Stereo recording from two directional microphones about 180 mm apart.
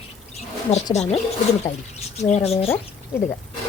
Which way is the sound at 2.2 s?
35° left (ahead or behind).